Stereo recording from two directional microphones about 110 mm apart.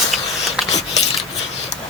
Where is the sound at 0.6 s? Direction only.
90° left.